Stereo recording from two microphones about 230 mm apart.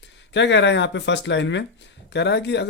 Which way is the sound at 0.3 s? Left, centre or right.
Left.